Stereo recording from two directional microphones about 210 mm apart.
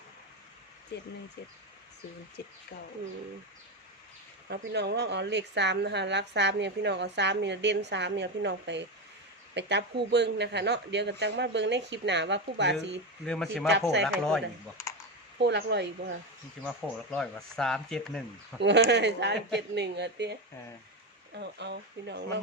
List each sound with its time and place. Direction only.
0.9 s speech: 55° left (ahead or behind)
4.4 s a woman's voice: 50° right (ahead or behind)
13.2 s speech: 5° left (ahead or behind)
15.4 s a woman's voice: 55° right (ahead or behind)
16.6 s speech: 5° left (ahead or behind)
18.6 s a woman's voice: 55° right (ahead or behind)
21.3 s speech: 55° right (ahead or behind)